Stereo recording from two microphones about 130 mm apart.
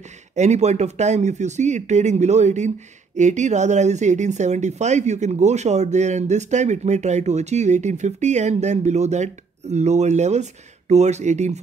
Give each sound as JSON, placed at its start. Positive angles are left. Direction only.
{"t": 0.4, "sound": "speech", "side_deg": -60}